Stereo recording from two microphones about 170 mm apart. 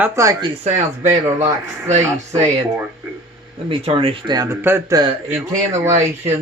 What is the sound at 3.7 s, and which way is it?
Speech, 30° right (ahead or behind).